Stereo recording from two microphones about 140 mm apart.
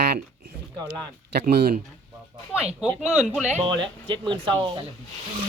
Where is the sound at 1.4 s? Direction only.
90° right.